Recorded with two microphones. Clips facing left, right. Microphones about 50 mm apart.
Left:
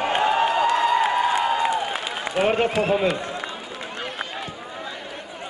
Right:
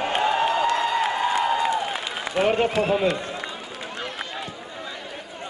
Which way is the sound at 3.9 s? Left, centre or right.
Left.